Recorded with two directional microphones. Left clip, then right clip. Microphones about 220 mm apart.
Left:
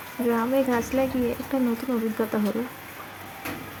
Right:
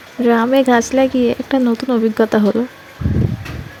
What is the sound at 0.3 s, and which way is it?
Speech, 35° right (ahead or behind).